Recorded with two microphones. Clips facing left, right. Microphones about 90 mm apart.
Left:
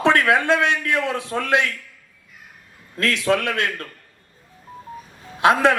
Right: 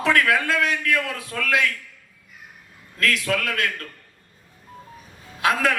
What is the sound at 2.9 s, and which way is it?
Speech, 30° left (ahead or behind).